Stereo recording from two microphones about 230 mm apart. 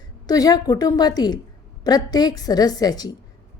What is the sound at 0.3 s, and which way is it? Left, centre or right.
A woman's voice, centre.